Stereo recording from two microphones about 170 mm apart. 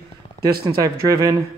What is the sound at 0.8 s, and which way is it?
Speech, 20° right (ahead or behind).